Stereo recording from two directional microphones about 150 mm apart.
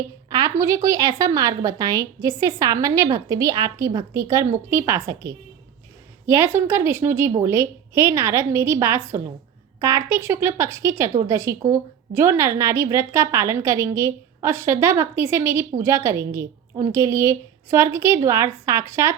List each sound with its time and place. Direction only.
0.3 s a woman's voice: 25° right (ahead or behind)